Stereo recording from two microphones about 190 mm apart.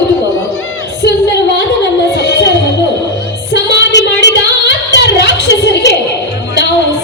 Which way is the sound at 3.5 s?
65° left (ahead or behind).